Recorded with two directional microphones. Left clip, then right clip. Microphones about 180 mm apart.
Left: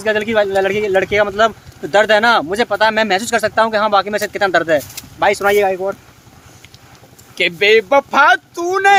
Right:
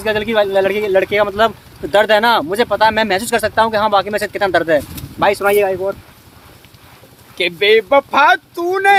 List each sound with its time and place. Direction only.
0.0 s speech: 5° right (ahead or behind)
7.3 s speech: 20° left (ahead or behind)